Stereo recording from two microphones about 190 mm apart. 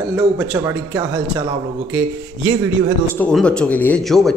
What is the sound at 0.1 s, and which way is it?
A man's voice, 15° right (ahead or behind).